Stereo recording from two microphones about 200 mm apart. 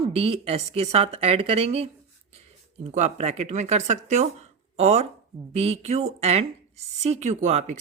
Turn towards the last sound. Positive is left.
turn(degrees=-35)  # may be behind; listen again after turning